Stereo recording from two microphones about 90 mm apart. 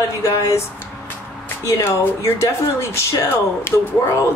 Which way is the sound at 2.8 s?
30° left (ahead or behind).